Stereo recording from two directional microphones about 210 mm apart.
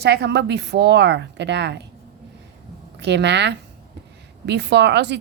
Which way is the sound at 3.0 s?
55° right (ahead or behind).